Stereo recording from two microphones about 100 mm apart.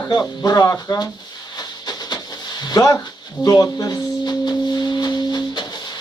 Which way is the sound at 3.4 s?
35° left (ahead or behind).